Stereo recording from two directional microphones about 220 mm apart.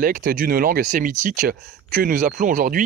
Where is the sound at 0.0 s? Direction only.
40° right (ahead or behind).